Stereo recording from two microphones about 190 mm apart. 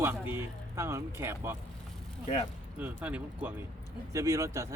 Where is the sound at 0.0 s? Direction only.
10° right (ahead or behind).